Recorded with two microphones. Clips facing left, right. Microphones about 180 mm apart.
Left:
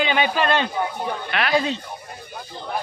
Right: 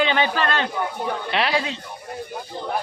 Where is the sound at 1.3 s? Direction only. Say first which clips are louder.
Right 2 dB; 30° right (ahead or behind).